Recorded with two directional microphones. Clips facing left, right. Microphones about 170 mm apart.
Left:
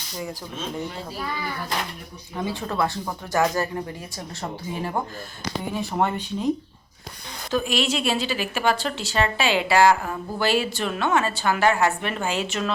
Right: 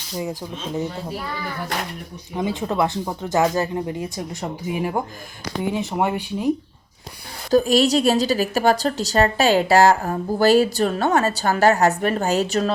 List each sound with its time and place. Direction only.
2.3 s speech: 20° right (ahead or behind)
7.5 s a woman's voice: 40° right (ahead or behind)